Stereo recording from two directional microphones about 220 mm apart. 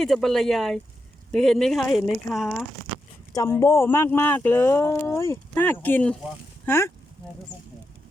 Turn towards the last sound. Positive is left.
turn(degrees=10)  # may be behind; listen again after turning